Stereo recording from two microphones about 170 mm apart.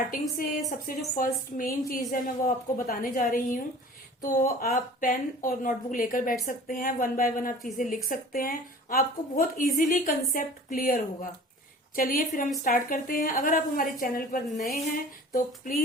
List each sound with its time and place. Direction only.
0.1 s a woman's voice: 55° left (ahead or behind)